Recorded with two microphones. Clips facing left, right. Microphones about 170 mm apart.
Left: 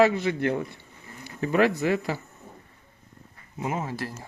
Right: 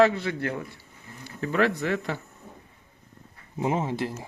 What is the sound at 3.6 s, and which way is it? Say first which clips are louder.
Speech: right 4 dB; 25° right (ahead or behind).